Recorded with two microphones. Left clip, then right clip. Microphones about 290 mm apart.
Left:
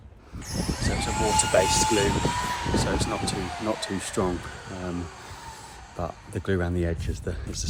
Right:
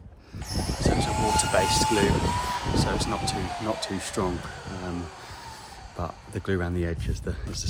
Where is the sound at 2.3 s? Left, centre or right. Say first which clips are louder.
Even; right.